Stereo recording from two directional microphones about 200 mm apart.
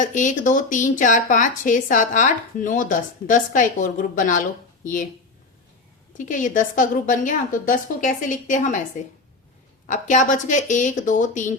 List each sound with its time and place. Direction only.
0.0 s speech: 40° left (ahead or behind)
6.1 s speech: 40° left (ahead or behind)
9.9 s speech: 40° left (ahead or behind)